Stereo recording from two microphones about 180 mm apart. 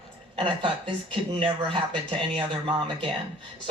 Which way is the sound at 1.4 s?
30° right (ahead or behind).